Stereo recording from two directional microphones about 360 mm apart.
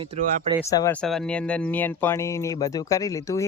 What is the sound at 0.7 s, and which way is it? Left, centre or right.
Speech, centre.